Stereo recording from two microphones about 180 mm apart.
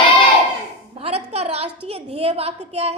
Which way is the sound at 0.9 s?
35° right (ahead or behind).